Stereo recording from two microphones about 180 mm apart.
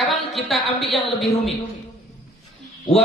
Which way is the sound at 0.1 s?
Centre (ahead or behind).